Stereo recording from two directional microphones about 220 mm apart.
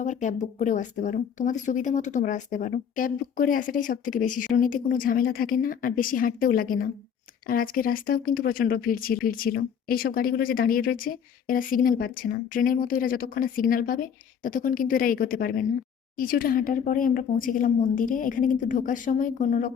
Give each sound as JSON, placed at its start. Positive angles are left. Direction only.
{"t": 0.0, "sound": "speech", "side_deg": 35}